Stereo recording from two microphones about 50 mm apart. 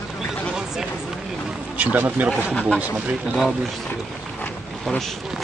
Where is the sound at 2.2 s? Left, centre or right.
Right.